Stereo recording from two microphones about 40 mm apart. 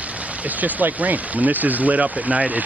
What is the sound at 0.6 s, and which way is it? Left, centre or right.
Speech, right.